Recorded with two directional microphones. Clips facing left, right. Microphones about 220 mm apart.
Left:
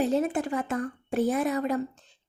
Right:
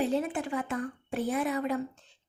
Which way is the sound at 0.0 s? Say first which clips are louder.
Left 4 dB; 45° left (ahead or behind).